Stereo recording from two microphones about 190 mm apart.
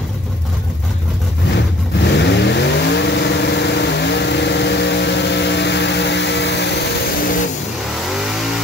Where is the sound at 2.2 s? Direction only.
65° left (ahead or behind).